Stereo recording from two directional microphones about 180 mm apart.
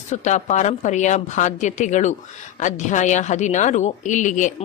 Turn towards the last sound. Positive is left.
turn(degrees=45)  # may be behind; listen again after turning